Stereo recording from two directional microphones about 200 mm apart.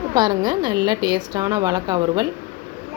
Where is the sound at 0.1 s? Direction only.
20° right (ahead or behind).